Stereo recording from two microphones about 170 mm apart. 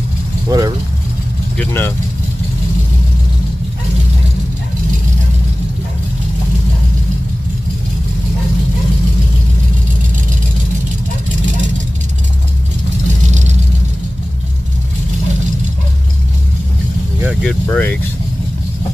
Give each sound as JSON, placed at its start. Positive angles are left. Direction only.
{"t": 0.5, "sound": "speech", "side_deg": -20}
{"t": 1.6, "sound": "speech", "side_deg": 10}
{"t": 17.4, "sound": "speech", "side_deg": 10}